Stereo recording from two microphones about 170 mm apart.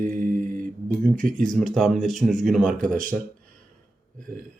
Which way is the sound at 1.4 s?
Centre (ahead or behind).